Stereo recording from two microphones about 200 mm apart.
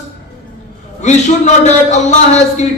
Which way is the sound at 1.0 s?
35° left (ahead or behind).